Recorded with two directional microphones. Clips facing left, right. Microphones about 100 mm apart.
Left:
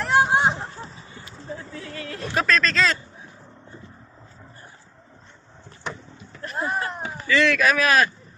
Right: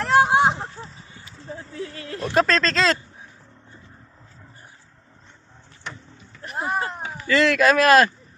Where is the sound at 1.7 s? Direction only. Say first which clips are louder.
Right 2 dB; 30° right (ahead or behind).